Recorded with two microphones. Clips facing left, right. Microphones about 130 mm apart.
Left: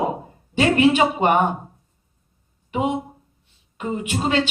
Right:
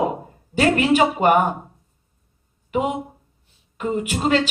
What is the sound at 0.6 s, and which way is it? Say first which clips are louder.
Speech: even; 40° right (ahead or behind).